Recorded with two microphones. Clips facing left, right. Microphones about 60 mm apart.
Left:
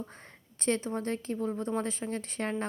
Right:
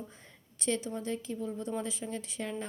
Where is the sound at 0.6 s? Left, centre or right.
Left.